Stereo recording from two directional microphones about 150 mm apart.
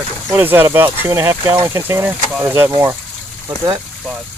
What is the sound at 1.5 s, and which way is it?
Speech, 25° right (ahead or behind).